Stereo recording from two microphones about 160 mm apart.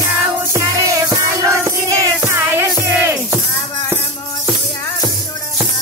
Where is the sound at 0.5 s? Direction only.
20° right (ahead or behind).